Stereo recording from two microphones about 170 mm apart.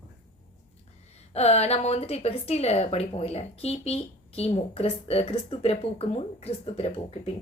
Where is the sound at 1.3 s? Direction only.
40° left (ahead or behind).